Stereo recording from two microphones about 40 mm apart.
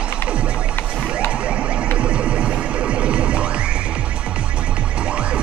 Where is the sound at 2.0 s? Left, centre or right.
Right.